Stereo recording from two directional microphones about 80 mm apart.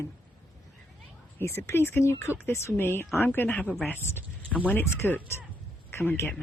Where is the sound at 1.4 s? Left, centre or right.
Left.